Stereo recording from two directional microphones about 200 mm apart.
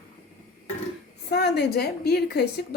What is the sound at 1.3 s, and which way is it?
A woman's voice, 55° left (ahead or behind).